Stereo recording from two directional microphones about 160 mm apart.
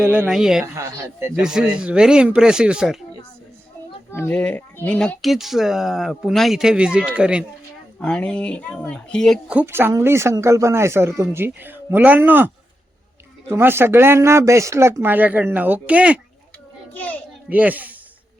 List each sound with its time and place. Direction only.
0.3 s speech: 5° right (ahead or behind)
0.6 s a woman's voice: 20° right (ahead or behind)
1.4 s speech: 5° right (ahead or behind)
4.1 s speech: 10° left (ahead or behind); by 7.4 s 5° right (ahead or behind)
7.9 s speech: 5° left (ahead or behind)
9.6 s speech: 15° right (ahead or behind)
13.5 s speech: 15° right (ahead or behind)
16.9 s a child's voice: 10° left (ahead or behind)
17.5 s speech: 10° right (ahead or behind)